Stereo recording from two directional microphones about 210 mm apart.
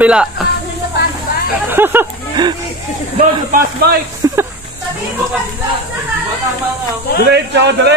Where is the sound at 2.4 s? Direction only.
20° right (ahead or behind).